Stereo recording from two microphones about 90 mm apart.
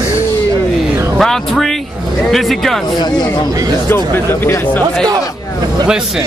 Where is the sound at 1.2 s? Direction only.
Centre (ahead or behind).